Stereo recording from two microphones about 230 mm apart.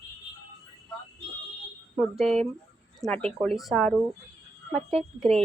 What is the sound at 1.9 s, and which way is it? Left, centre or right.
Speech, centre.